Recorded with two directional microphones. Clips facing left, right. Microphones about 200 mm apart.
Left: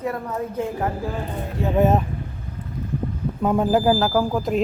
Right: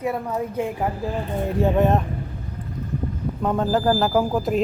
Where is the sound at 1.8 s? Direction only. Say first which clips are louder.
Left 3 dB; 5° left (ahead or behind).